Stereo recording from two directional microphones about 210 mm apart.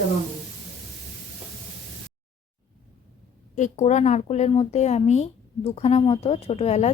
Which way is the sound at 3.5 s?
35° left (ahead or behind).